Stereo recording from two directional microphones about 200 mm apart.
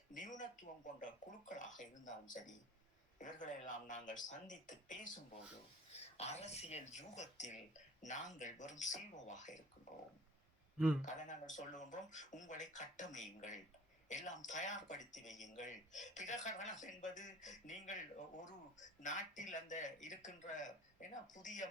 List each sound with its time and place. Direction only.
0.1 s a sound: 40° left (ahead or behind)
1.5 s speech: 40° left (ahead or behind)
6.1 s speech: 35° left (ahead or behind)
11.0 s speech: 40° left (ahead or behind)